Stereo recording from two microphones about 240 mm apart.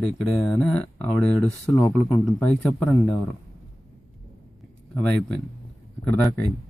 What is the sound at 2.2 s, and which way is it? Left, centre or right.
Speech, centre.